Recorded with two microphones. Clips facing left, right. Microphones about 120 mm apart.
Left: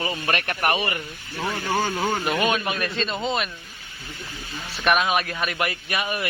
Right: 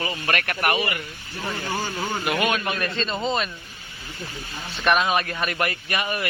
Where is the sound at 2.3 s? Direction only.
20° left (ahead or behind).